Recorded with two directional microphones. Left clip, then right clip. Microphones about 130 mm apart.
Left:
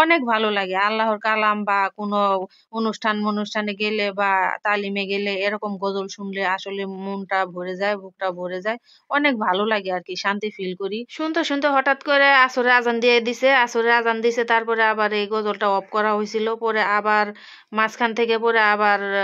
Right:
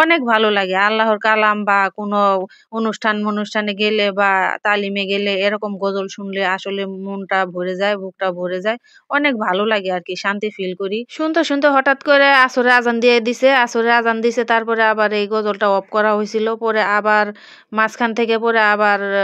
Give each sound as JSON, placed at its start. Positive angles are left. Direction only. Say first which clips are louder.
{"t": 0.0, "sound": "speech", "louder": "right 4 dB", "side_deg": -35}
{"t": 3.2, "sound": "speech", "louder": "right 3 dB", "side_deg": -20}
{"t": 3.5, "sound": "speech", "louder": "right 8 dB", "side_deg": -35}